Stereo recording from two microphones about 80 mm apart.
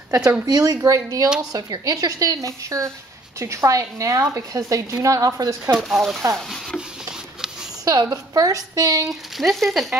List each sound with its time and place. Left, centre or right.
0.5 s speech: right
5.8 s speech: centre
7.8 s speech: right
9.0 s speech: centre